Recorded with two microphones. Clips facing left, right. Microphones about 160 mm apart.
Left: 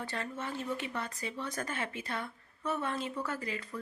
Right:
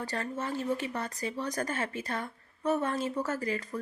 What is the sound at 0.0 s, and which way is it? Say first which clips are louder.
Speech: right 4 dB; 40° right (ahead or behind).